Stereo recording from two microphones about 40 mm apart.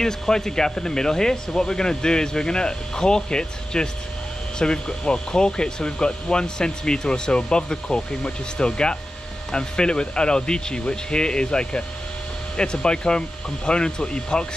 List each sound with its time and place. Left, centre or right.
0.0 s speech: centre